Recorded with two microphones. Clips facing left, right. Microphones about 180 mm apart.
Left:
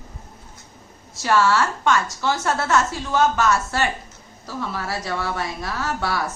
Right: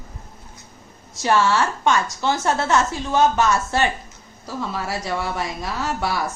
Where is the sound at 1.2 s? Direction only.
20° right (ahead or behind).